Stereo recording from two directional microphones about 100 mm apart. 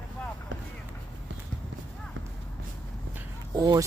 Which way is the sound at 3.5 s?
40° right (ahead or behind).